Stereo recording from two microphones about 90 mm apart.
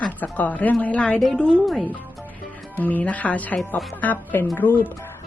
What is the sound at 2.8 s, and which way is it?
Speech, 20° left (ahead or behind).